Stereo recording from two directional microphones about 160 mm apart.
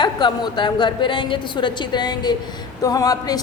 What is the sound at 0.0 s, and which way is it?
A woman's voice, 30° left (ahead or behind).